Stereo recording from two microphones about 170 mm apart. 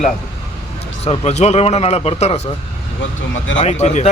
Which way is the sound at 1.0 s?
40° left (ahead or behind).